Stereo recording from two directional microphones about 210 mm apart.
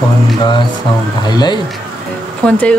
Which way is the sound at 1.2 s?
20° left (ahead or behind).